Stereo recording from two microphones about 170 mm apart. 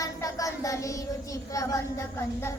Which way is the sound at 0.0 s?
20° left (ahead or behind).